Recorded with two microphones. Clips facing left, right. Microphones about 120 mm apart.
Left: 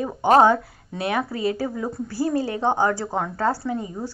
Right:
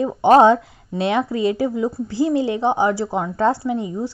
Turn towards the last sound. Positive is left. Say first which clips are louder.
# right 5 dB
turn(degrees=-20)  # may be behind; listen again after turning